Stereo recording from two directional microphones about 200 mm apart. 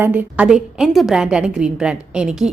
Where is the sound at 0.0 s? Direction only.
10° right (ahead or behind).